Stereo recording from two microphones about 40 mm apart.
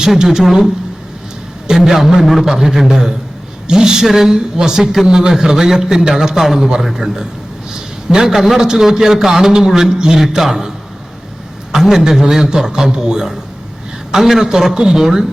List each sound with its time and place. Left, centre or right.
0.0 s a man's voice: centre
11.7 s a man's voice: centre